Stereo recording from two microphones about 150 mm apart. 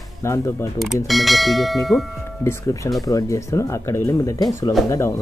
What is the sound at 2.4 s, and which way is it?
Speech, 20° left (ahead or behind).